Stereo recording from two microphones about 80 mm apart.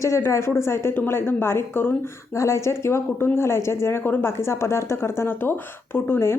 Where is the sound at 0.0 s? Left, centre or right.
Left.